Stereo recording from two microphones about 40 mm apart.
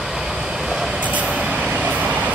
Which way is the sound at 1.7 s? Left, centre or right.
Right.